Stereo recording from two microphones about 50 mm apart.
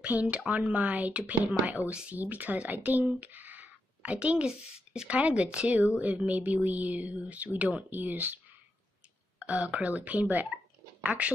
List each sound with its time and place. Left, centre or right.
0.0 s speech: right
2.1 s speech: right
4.5 s speech: centre
5.1 s speech: right
9.4 s speech: right